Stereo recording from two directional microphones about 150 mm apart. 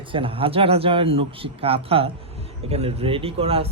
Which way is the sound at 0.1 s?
35° right (ahead or behind).